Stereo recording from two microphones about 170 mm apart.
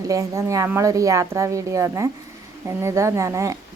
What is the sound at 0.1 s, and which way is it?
A woman's voice, 15° right (ahead or behind).